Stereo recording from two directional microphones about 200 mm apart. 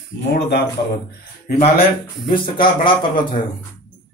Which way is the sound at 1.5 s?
30° left (ahead or behind).